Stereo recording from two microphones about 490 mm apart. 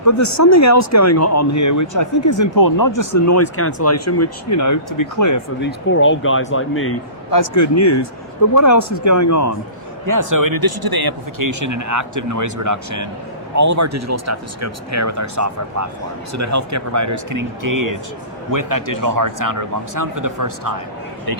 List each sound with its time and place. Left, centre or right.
0.0 s speech: left
5.5 s speech: left
7.3 s speech: left
10.1 s speech: right